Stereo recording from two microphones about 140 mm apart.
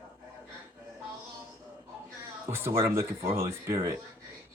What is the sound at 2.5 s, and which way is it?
Speech, 20° right (ahead or behind).